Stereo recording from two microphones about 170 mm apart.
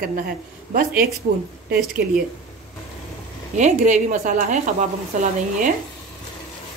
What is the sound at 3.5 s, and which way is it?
A woman's voice, 45° right (ahead or behind).